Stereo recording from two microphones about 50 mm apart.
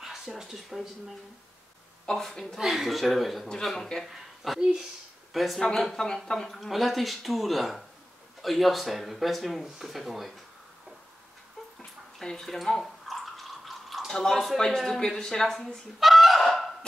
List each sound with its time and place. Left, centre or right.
0.0 s speech: centre
2.0 s speech: centre
3.4 s speech: centre
4.6 s speech: centre
5.3 s speech: centre
6.5 s speech: centre
12.2 s drip: centre
14.8 s speech: centre
16.0 s fowl: centre